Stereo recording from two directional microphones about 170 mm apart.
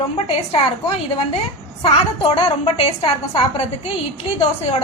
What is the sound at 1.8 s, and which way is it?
A woman's voice, 30° left (ahead or behind).